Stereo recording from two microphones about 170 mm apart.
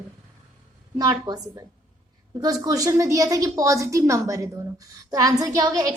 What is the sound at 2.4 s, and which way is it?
A woman's voice, 20° right (ahead or behind).